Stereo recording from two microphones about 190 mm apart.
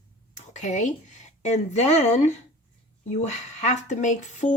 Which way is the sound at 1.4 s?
35° left (ahead or behind).